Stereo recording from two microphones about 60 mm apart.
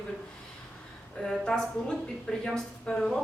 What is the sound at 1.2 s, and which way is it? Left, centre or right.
A woman's voice, centre.